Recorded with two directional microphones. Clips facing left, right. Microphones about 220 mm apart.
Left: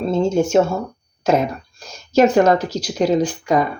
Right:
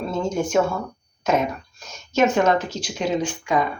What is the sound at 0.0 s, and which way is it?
Speech, 25° left (ahead or behind).